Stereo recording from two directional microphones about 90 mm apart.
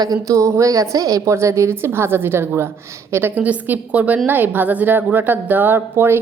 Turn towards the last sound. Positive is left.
turn(degrees=-25)  # may be behind; listen again after turning